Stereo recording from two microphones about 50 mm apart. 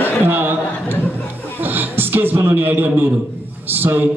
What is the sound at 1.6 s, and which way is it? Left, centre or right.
A man's voice, right.